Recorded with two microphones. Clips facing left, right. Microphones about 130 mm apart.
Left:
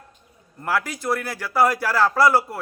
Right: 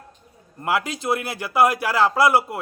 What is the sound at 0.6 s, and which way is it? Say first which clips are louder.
A man's voice: right 1 dB; 20° right (ahead or behind).